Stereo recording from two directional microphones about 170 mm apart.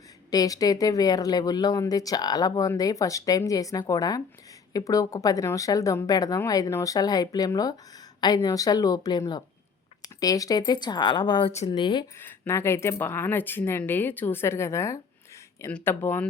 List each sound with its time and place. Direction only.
0.3 s speech: 20° left (ahead or behind)
12.2 s speech: 15° left (ahead or behind)